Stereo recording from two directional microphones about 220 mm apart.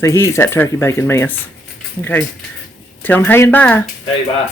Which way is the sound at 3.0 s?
10° left (ahead or behind).